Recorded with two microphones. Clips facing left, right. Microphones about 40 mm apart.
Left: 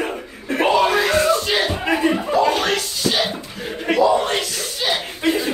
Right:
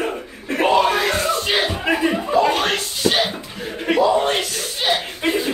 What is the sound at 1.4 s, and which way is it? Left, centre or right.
Music, right.